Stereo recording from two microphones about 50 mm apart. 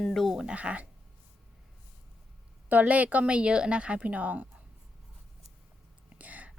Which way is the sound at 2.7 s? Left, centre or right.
Right.